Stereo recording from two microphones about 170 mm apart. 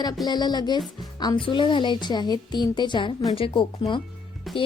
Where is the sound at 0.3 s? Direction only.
25° left (ahead or behind).